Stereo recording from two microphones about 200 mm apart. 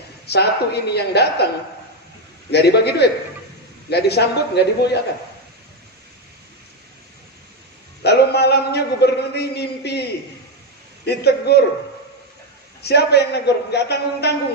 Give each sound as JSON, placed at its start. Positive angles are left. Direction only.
{"t": 0.3, "sound": "a man's voice", "side_deg": 55}
{"t": 2.5, "sound": "a man's voice", "side_deg": 55}
{"t": 8.0, "sound": "a man's voice", "side_deg": 55}
{"t": 11.1, "sound": "a man's voice", "side_deg": 55}
{"t": 12.8, "sound": "a man's voice", "side_deg": 55}